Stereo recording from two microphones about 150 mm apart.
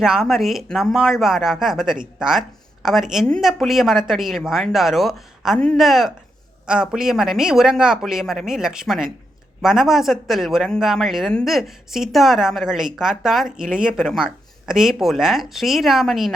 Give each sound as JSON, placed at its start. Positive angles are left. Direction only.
{"t": 0.0, "sound": "a man's voice", "side_deg": -5}